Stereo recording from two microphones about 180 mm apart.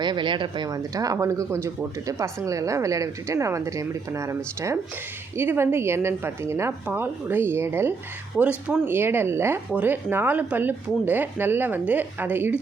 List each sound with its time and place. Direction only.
0.0 s speech: 25° right (ahead or behind)
5.4 s speech: 10° right (ahead or behind)